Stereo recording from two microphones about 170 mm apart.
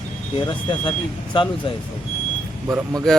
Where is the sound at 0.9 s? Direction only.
30° left (ahead or behind).